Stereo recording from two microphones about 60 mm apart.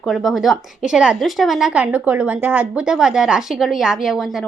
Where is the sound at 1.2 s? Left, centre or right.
Centre.